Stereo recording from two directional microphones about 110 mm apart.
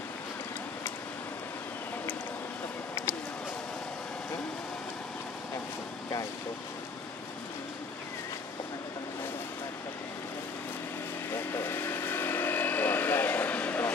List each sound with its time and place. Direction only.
11.3 s vehicle: 20° left (ahead or behind)